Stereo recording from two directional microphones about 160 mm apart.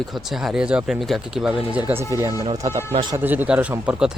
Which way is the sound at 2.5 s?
40° right (ahead or behind).